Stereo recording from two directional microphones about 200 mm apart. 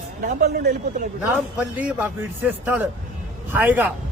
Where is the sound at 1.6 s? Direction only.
5° right (ahead or behind).